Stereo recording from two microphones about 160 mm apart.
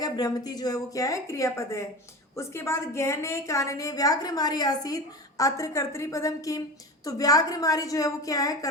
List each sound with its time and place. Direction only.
0.0 s a woman's voice: 25° left (ahead or behind)